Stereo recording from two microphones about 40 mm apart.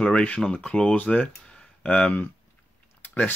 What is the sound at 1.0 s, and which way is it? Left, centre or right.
Speech, left.